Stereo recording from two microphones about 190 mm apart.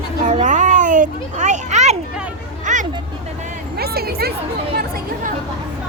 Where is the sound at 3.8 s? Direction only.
55° right (ahead or behind).